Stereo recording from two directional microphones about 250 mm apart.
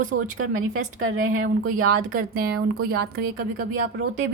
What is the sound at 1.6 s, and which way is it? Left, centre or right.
A woman's voice, right.